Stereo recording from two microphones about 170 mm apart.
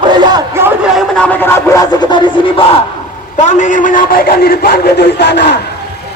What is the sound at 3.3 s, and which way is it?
A man's voice, 45° left (ahead or behind).